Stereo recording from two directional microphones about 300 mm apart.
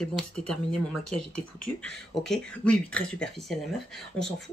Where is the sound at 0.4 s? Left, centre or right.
Left.